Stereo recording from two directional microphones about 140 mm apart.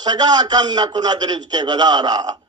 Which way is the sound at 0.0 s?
30° right (ahead or behind).